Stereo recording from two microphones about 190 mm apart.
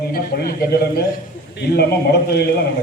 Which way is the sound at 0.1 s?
50° left (ahead or behind).